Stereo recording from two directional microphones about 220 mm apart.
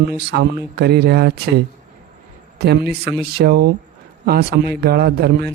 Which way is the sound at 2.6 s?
45° right (ahead or behind).